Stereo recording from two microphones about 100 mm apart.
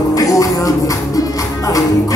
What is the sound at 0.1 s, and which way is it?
Music, 35° left (ahead or behind).